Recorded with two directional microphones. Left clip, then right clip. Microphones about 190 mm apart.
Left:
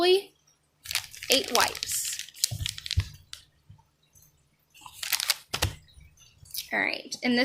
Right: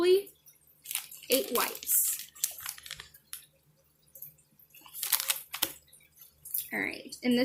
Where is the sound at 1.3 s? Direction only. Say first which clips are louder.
Left 5 dB; centre (ahead or behind).